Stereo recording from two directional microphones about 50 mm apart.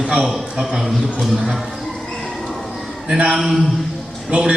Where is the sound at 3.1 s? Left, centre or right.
Right.